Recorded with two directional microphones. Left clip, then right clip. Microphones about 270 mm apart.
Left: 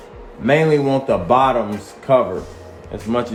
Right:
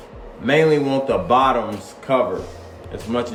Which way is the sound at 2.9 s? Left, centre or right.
Centre.